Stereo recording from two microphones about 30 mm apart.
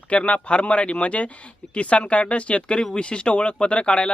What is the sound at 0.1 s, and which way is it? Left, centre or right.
Speech, left.